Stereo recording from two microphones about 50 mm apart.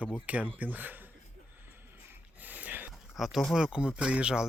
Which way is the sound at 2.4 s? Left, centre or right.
Right.